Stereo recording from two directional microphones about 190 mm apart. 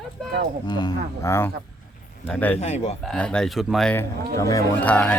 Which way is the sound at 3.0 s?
5° left (ahead or behind).